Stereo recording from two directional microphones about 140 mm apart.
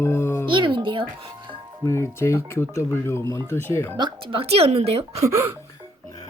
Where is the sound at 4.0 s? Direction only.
40° right (ahead or behind).